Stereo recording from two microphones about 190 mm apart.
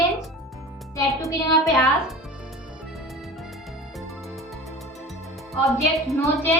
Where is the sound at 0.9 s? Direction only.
15° left (ahead or behind).